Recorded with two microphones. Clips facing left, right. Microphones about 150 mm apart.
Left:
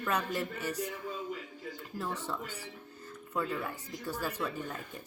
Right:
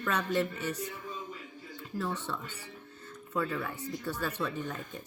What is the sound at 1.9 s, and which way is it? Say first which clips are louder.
Speech: right 3 dB; 15° left (ahead or behind).